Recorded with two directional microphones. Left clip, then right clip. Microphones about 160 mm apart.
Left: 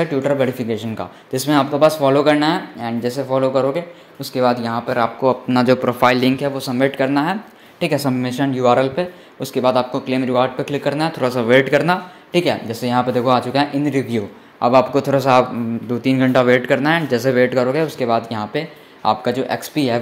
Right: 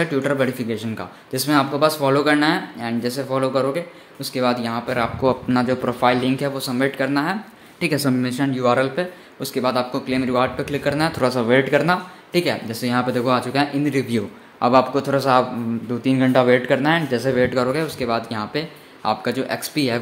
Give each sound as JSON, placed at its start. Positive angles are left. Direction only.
{"t": 0.0, "sound": "speech", "side_deg": 0}
{"t": 5.5, "sound": "speech", "side_deg": 15}
{"t": 5.9, "sound": "speech", "side_deg": 30}
{"t": 6.5, "sound": "speech", "side_deg": 10}